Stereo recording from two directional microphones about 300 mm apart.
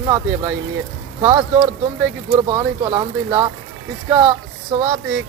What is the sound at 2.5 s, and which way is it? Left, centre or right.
Speech, centre.